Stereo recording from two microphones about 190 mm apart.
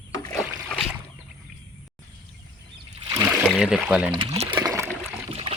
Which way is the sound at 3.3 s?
Centre (ahead or behind).